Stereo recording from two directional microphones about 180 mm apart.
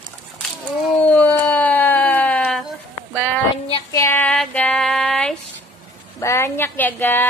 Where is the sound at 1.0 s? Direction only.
10° left (ahead or behind).